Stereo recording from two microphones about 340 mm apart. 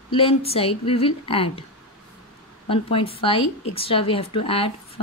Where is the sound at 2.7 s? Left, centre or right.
Centre.